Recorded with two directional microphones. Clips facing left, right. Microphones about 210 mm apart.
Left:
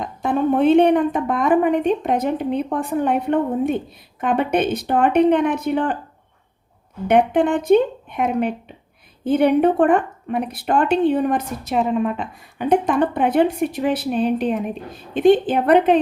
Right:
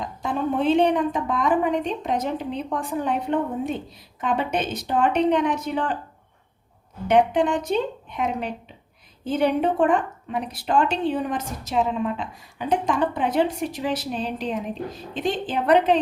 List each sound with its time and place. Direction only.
0.0 s a woman's voice: 60° left (ahead or behind)
7.1 s a woman's voice: 55° left (ahead or behind)